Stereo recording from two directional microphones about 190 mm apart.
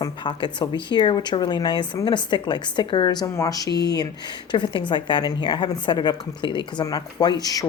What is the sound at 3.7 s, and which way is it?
Speech, 60° left (ahead or behind).